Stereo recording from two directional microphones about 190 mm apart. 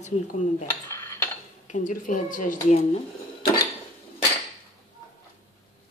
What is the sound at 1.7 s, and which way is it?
Speech, 40° left (ahead or behind).